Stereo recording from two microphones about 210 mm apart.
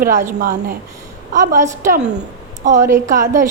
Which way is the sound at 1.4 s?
15° right (ahead or behind).